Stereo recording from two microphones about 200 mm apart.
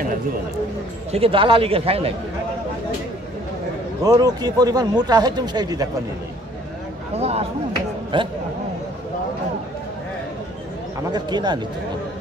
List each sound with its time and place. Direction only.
1.1 s speech: 25° right (ahead or behind)
4.0 s speech: 20° right (ahead or behind)
7.2 s speech: 30° right (ahead or behind)
11.1 s speech: 20° right (ahead or behind)